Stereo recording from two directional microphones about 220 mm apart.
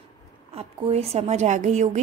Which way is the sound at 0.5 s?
30° right (ahead or behind).